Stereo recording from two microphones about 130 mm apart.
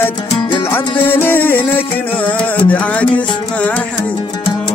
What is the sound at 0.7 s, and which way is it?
Music, 15° left (ahead or behind).